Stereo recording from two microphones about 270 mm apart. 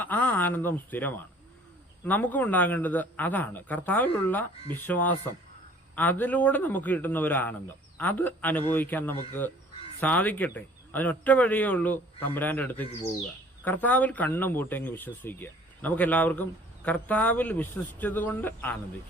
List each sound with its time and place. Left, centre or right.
0.0 s speech: centre